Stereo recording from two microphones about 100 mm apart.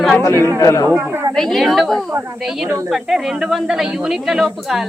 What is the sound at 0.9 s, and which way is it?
Speech, 25° right (ahead or behind).